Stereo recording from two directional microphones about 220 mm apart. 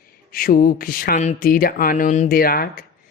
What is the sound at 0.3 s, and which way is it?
A woman's voice, 40° left (ahead or behind).